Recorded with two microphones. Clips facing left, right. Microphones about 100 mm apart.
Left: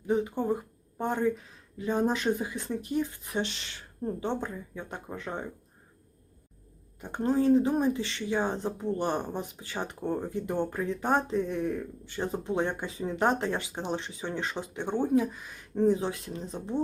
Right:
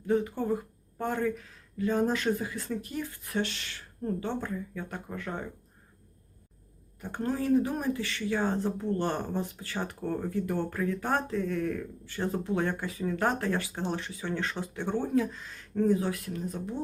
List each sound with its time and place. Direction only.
0.1 s speech: 20° left (ahead or behind)
7.0 s speech: 20° left (ahead or behind)